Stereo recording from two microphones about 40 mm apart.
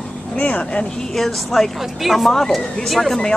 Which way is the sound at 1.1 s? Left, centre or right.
Centre.